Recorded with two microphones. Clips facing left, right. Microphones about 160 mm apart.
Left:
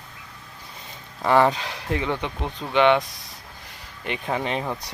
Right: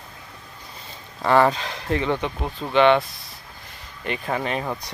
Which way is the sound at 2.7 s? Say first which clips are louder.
Right 2 dB; 15° left (ahead or behind).